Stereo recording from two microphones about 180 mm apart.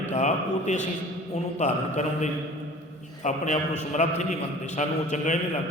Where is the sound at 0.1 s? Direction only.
40° left (ahead or behind).